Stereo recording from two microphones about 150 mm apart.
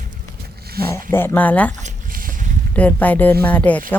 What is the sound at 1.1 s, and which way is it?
Speech, 15° left (ahead or behind).